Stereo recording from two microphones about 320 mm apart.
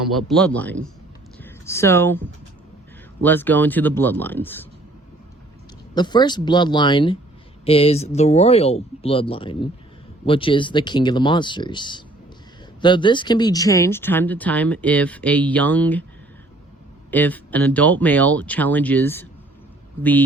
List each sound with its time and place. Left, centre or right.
0.0 s speech: centre
5.9 s speech: centre
17.1 s speech: centre